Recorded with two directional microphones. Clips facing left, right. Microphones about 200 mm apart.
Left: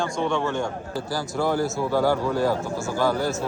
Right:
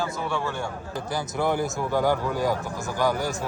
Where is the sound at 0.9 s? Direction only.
20° right (ahead or behind).